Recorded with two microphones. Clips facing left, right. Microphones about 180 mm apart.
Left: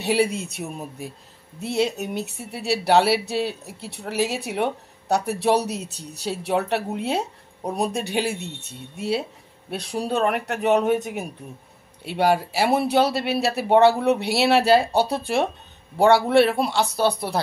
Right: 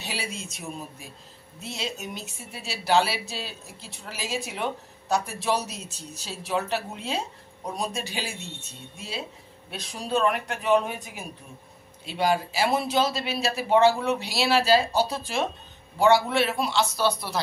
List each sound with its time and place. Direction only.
0.0 s speech: 60° left (ahead or behind)